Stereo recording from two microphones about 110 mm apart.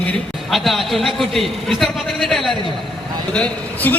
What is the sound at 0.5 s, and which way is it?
A man's voice, centre (ahead or behind).